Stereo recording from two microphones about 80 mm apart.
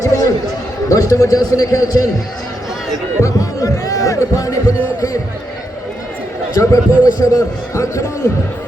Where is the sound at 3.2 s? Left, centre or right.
Left.